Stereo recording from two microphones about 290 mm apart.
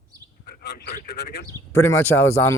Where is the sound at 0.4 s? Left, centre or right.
Left.